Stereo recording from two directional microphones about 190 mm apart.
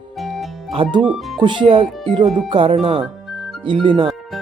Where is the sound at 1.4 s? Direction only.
25° right (ahead or behind).